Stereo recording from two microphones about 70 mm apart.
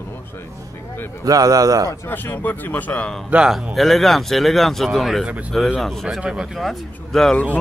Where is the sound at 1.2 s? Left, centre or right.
Right.